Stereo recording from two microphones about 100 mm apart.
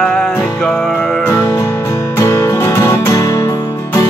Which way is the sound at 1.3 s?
30° left (ahead or behind).